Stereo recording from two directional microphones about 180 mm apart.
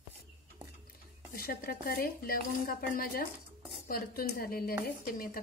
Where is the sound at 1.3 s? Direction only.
60° left (ahead or behind).